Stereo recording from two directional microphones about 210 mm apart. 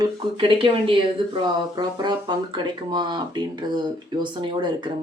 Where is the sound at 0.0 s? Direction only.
25° right (ahead or behind).